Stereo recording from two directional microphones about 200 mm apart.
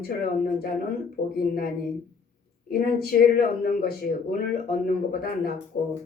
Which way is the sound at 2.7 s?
50° left (ahead or behind).